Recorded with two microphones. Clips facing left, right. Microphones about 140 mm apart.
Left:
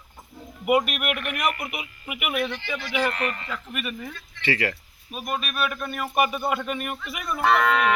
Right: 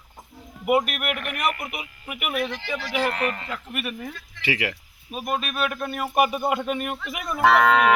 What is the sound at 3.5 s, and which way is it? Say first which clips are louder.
Speech: right 1 dB; 10° right (ahead or behind).